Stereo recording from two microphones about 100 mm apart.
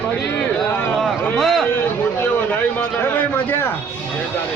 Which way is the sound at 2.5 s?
20° left (ahead or behind).